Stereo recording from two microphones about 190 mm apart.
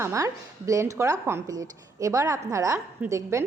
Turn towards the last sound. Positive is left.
turn(degrees=-15)  # may be behind; listen again after turning